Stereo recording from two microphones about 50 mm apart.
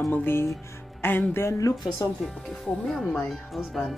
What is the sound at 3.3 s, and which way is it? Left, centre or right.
Speech, centre.